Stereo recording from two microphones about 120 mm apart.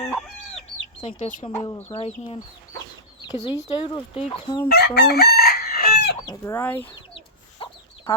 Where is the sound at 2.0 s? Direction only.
55° left (ahead or behind).